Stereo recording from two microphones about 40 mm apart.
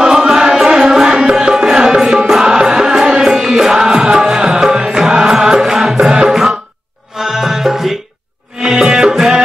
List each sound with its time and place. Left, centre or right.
0.0 s music: centre